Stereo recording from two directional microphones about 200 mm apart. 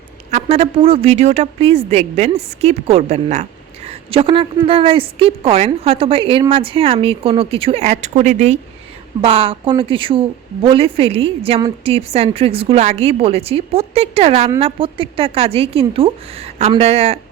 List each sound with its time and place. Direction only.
0.3 s a woman's voice: 35° right (ahead or behind)